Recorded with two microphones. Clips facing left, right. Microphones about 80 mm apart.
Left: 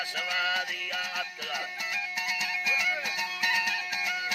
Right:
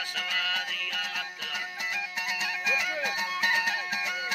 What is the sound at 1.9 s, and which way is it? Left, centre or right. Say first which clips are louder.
Music: right 1 dB; right.